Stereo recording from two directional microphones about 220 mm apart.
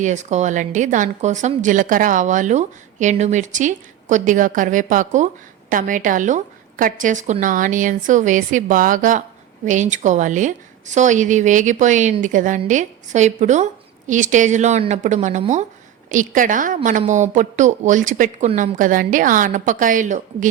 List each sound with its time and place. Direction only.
0.0 s a woman's voice: 35° right (ahead or behind)